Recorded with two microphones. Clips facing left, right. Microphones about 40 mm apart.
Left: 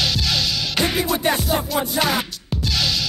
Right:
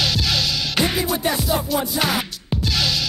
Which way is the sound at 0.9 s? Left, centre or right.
Left.